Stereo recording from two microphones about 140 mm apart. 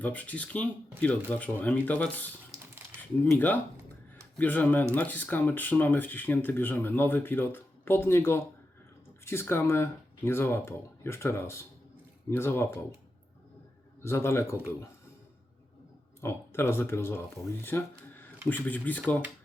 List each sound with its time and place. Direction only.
0.0 s speech: 10° left (ahead or behind)
14.0 s speech: 20° left (ahead or behind)
16.2 s speech: 15° left (ahead or behind)